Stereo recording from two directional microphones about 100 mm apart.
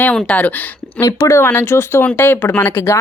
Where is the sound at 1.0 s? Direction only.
30° left (ahead or behind).